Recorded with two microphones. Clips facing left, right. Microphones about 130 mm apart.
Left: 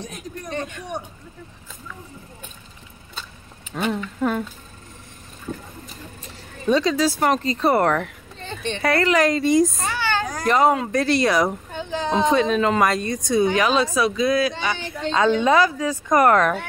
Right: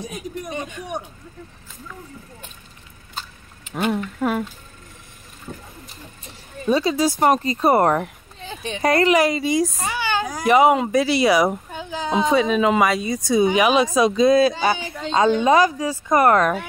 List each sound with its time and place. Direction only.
0.0 s speech: 10° right (ahead or behind)
3.7 s speech: 10° right (ahead or behind)
6.7 s speech: 10° right (ahead or behind)
8.4 s a sound: 5° right (ahead or behind)
8.8 s speech: 20° right (ahead or behind); by 9.8 s centre (ahead or behind)
9.8 s speech: 15° right (ahead or behind)
14.8 s speech: 5° right (ahead or behind)
15.9 s speech: 30° right (ahead or behind)